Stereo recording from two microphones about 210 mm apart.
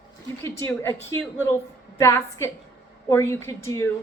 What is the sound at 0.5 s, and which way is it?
Speech, 15° left (ahead or behind).